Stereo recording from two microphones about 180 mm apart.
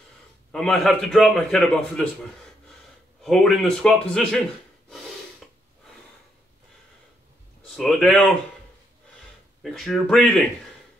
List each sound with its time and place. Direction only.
0.5 s a man's voice: 5° left (ahead or behind)
3.2 s a man's voice: centre (ahead or behind)
7.6 s speech: centre (ahead or behind)
9.6 s a man's voice: centre (ahead or behind)